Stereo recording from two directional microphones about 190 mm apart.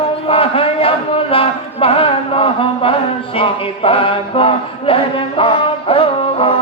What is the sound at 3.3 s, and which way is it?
Chant, 30° left (ahead or behind).